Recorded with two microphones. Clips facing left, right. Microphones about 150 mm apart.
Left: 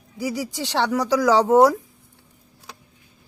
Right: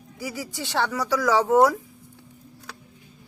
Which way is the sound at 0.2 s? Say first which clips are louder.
Left 6 dB; 15° left (ahead or behind).